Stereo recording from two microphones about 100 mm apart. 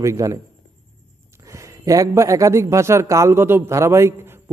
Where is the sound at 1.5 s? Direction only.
35° right (ahead or behind).